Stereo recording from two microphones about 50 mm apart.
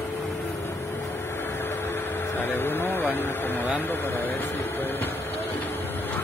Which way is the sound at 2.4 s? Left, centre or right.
Left.